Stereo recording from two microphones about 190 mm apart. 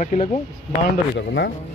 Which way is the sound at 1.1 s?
70° left (ahead or behind).